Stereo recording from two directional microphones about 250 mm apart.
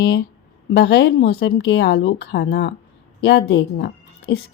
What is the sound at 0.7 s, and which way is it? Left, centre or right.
A woman's voice, left.